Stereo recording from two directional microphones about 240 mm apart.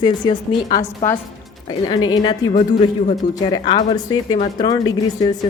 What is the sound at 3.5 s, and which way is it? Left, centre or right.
A woman's voice, left.